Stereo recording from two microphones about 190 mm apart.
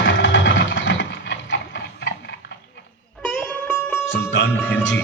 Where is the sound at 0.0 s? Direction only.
70° left (ahead or behind).